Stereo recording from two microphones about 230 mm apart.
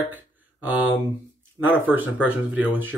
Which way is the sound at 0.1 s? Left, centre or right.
Centre.